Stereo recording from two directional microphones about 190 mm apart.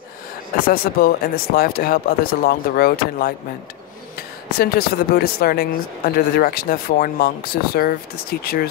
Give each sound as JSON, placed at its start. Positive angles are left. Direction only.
{"t": 0.7, "sound": "speech", "side_deg": 50}
{"t": 4.6, "sound": "speech", "side_deg": 55}